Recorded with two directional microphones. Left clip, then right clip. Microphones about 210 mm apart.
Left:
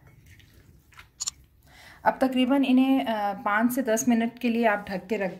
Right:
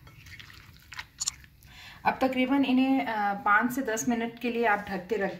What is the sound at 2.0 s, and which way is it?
A woman's voice, 35° left (ahead or behind).